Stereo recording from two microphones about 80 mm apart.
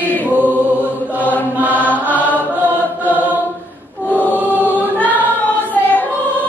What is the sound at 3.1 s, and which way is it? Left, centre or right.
Choir, centre.